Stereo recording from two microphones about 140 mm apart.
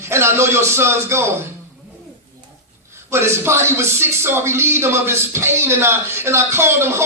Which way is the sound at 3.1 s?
20° right (ahead or behind).